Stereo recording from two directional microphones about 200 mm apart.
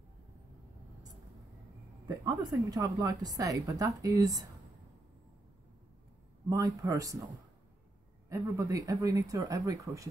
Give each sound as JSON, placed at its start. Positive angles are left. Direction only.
{"t": 2.0, "sound": "a woman's voice", "side_deg": -20}
{"t": 6.5, "sound": "a woman's voice", "side_deg": -15}
{"t": 8.3, "sound": "a woman's voice", "side_deg": -15}